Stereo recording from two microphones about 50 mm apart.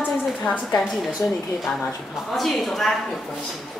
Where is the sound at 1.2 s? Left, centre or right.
Left.